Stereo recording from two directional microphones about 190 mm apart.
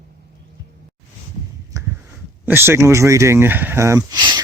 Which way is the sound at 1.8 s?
15° right (ahead or behind).